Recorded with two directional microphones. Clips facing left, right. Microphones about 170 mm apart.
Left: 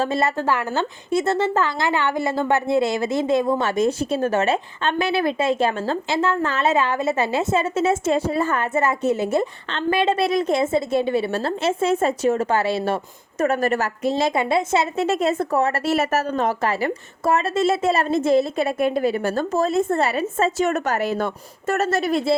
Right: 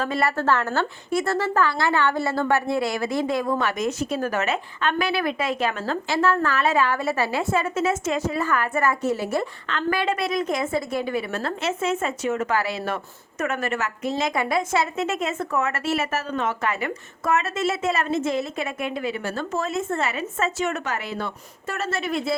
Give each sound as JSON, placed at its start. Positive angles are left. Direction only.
{"t": 0.0, "sound": "a woman's voice", "side_deg": 25}